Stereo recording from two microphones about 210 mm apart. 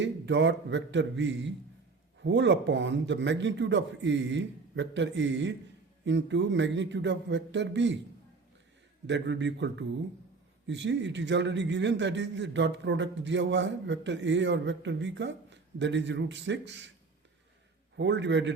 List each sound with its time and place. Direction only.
0.0 s a man's voice: 60° right (ahead or behind)
9.0 s a man's voice: 55° right (ahead or behind)
17.9 s a man's voice: 55° right (ahead or behind)